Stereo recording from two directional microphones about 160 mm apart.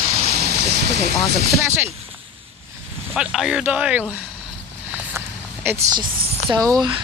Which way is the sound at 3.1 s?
5° right (ahead or behind).